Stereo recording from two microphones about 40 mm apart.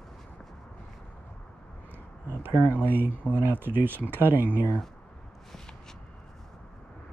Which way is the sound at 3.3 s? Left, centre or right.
Right.